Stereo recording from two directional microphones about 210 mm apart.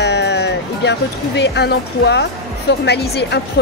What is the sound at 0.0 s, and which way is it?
Speech, 55° left (ahead or behind).